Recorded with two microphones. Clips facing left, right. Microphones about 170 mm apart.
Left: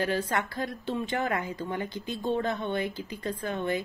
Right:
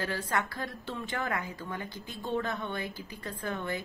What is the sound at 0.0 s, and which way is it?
Speech, 25° left (ahead or behind).